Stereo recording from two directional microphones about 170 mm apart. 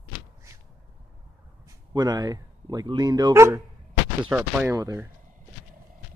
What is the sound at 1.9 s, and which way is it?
Speech, 25° right (ahead or behind).